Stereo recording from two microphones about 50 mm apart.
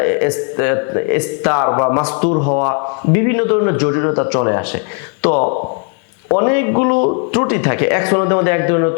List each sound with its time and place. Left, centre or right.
0.0 s a man's voice: left